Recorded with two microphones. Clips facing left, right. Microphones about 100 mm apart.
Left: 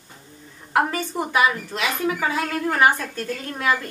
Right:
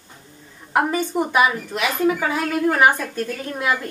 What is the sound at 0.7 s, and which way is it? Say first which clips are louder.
A woman's voice: right 2 dB; 20° right (ahead or behind).